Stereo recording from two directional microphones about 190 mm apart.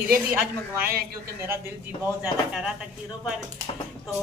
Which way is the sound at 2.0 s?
10° right (ahead or behind).